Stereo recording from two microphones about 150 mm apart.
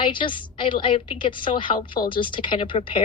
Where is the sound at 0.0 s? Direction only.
35° left (ahead or behind).